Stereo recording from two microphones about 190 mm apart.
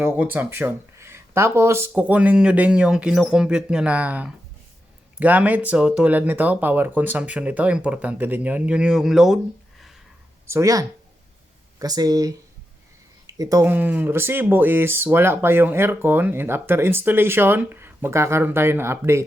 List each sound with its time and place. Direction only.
0.0 s speech: 10° right (ahead or behind)
10.4 s speech: 15° right (ahead or behind)